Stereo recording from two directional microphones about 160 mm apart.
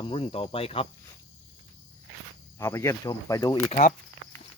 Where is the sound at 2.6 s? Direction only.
15° left (ahead or behind).